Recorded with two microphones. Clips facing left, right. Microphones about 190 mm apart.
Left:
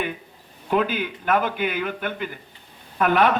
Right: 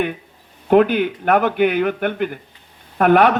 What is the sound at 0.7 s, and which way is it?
A man's voice, 60° right (ahead or behind).